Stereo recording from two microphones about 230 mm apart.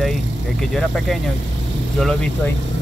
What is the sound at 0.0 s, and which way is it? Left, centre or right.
Vehicle, centre.